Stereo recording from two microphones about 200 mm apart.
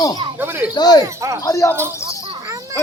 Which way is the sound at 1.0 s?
15° right (ahead or behind).